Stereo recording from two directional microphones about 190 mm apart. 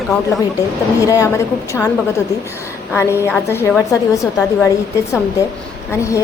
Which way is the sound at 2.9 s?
15° left (ahead or behind).